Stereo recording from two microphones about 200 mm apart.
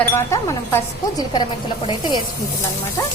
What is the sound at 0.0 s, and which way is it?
Speech, 10° left (ahead or behind).